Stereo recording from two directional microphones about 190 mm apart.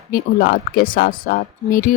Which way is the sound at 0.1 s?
50° left (ahead or behind).